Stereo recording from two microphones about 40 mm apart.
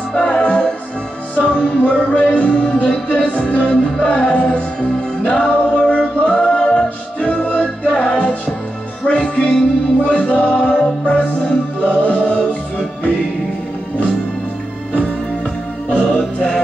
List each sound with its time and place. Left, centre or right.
0.1 s music: left
7.2 s music: left
15.9 s music: left